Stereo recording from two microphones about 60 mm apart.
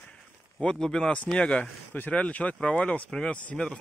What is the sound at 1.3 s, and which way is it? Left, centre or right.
Speech, centre.